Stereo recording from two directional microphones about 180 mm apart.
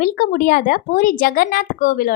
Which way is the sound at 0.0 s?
50° left (ahead or behind).